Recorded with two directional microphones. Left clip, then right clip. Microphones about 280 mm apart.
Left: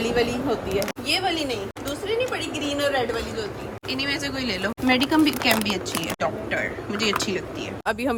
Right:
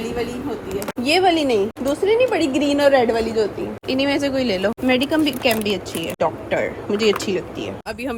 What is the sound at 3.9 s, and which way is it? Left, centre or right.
A woman's voice, centre.